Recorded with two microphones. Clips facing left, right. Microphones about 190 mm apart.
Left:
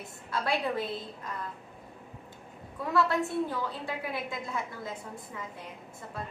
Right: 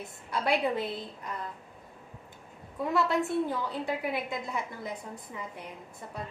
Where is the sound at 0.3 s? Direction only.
20° right (ahead or behind).